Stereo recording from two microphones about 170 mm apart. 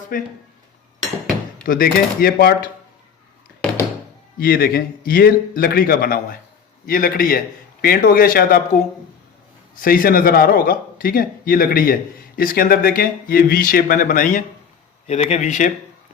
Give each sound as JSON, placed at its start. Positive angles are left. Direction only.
{"t": 0.1, "sound": "a man's voice", "side_deg": 55}
{"t": 1.6, "sound": "a man's voice", "side_deg": 60}
{"t": 4.4, "sound": "a man's voice", "side_deg": 60}
{"t": 9.8, "sound": "a man's voice", "side_deg": 60}
{"t": 15.0, "sound": "speech", "side_deg": 40}